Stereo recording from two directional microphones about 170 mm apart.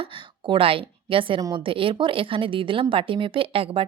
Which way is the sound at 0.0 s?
30° right (ahead or behind).